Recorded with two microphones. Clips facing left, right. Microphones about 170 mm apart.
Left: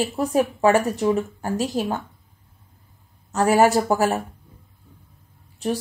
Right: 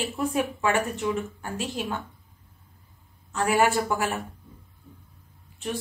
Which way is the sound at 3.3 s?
40° left (ahead or behind).